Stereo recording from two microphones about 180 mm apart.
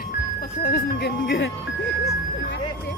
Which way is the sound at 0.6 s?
65° left (ahead or behind).